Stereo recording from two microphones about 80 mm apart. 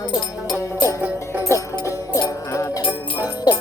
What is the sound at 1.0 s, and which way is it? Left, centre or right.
Music, centre.